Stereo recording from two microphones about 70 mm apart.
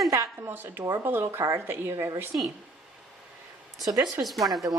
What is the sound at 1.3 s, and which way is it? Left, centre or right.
Speech, right.